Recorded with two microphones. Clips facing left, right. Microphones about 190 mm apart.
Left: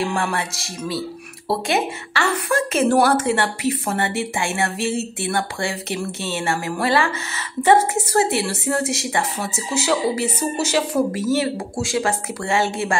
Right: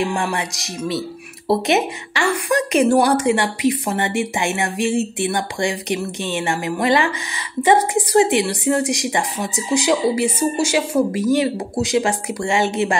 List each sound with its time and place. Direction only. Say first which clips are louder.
0.0 s a woman's voice: right 1 dB; 15° right (ahead or behind)